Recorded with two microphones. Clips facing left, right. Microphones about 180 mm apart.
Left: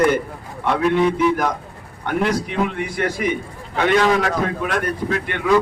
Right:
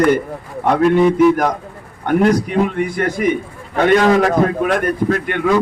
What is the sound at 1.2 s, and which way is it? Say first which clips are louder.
A man's voice: right 6 dB; 45° right (ahead or behind).